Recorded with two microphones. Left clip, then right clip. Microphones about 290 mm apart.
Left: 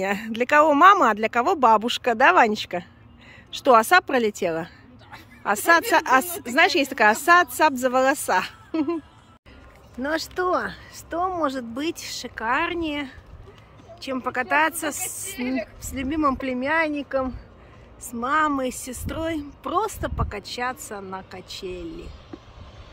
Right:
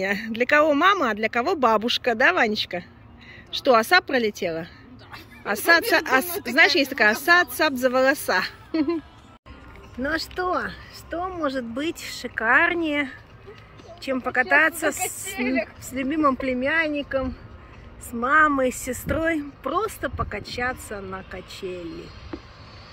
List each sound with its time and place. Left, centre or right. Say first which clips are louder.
0.0 s a woman's voice: right 1 dB; centre
10.0 s a woman's voice: left 1 dB; centre
15.0 s speech: right 4 dB; centre
15.9 s a woman's voice: right 1 dB; centre
18.2 s a woman's voice: right 4 dB; centre